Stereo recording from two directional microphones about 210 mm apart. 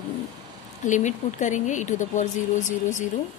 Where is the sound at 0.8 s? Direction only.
35° left (ahead or behind).